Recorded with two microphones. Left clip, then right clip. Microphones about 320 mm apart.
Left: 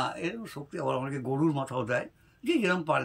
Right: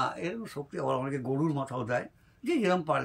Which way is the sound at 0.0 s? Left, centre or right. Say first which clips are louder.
Even; centre.